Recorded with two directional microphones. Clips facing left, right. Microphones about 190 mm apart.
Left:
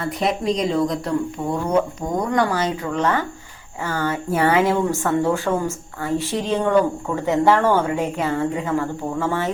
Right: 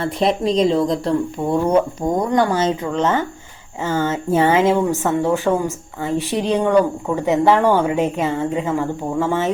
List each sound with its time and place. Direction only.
0.0 s speech: 30° right (ahead or behind)